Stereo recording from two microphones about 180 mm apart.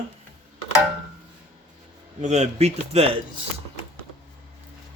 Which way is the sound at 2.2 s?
40° right (ahead or behind).